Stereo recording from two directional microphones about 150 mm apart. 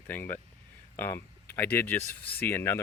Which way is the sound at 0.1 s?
15° left (ahead or behind).